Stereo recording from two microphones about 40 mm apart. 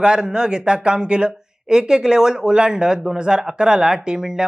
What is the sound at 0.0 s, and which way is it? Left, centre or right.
Speech, centre.